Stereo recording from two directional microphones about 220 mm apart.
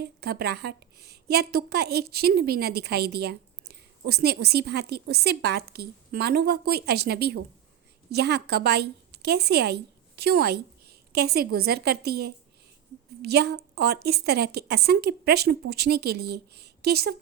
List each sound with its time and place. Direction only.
0.0 s a woman's voice: 45° right (ahead or behind)